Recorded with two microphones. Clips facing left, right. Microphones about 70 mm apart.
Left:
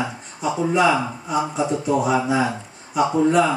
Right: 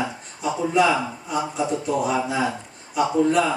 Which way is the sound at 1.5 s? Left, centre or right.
Centre.